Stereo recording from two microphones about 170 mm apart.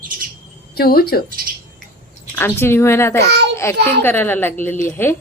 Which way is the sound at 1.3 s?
60° right (ahead or behind).